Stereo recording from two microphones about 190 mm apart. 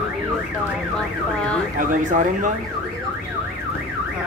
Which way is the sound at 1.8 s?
40° right (ahead or behind).